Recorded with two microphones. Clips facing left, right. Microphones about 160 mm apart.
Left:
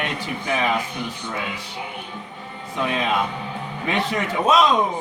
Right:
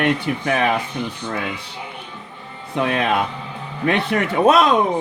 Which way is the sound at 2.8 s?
60° right (ahead or behind).